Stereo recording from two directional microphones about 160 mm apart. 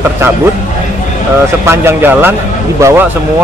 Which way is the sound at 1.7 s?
15° right (ahead or behind).